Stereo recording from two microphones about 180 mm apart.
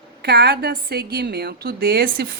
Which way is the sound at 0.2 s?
60° right (ahead or behind).